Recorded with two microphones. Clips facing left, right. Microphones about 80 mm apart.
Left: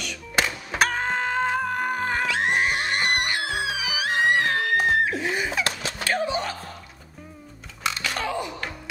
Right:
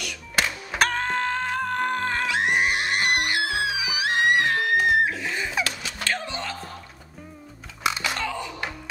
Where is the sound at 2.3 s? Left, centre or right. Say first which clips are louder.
Right 2 dB; centre.